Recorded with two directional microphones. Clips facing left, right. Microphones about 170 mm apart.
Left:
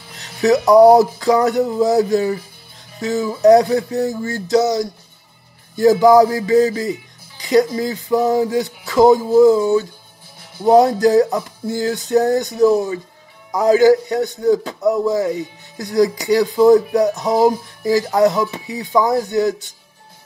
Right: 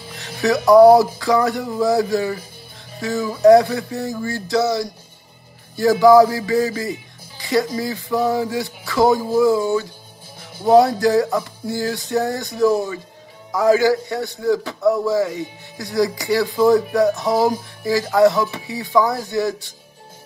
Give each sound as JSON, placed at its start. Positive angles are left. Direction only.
{"t": 0.4, "sound": "a man's voice", "side_deg": 20}